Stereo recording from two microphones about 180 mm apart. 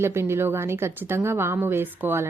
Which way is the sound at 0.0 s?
15° right (ahead or behind).